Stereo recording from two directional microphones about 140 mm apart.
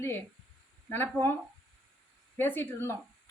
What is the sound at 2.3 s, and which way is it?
Speech, 15° left (ahead or behind).